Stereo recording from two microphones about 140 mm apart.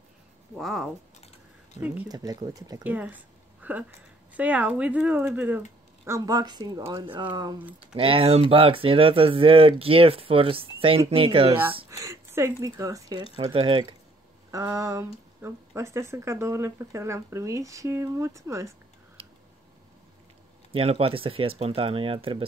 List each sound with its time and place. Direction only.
0.6 s speech: centre (ahead or behind)
2.0 s speech: 25° right (ahead or behind)
2.8 s speech: 10° right (ahead or behind)
3.6 s a sound: 10° right (ahead or behind)
4.4 s speech: 10° right (ahead or behind)
6.0 s speech: 25° right (ahead or behind)
7.9 s speech: 40° right (ahead or behind)
11.9 s speech: 25° right (ahead or behind)
13.5 s speech: 40° right (ahead or behind)
14.5 s speech: 20° right (ahead or behind)
20.7 s speech: 45° right (ahead or behind)